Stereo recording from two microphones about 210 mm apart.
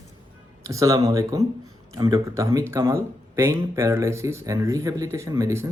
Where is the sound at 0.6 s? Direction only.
15° right (ahead or behind).